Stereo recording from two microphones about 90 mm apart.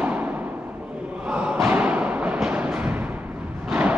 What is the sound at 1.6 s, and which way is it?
Music, 15° right (ahead or behind).